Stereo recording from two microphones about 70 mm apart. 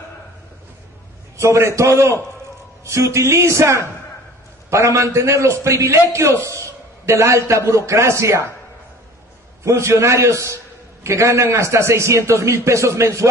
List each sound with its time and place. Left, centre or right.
1.4 s a man's voice: right
9.7 s a man's voice: right